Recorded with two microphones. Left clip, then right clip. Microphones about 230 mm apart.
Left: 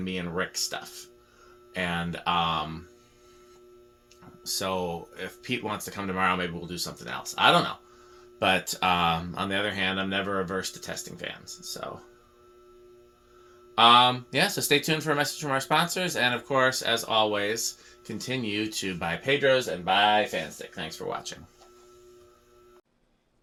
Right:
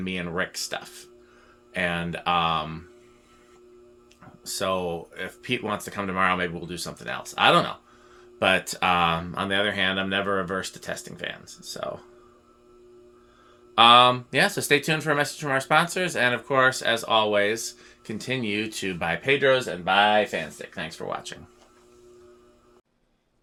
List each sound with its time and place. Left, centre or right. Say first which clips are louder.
0.0 s speech: right 2 dB; right
4.4 s speech: right 3 dB; right
13.7 s speech: right 3 dB; right